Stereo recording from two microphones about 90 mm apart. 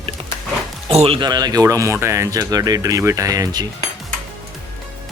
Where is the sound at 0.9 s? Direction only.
90° right.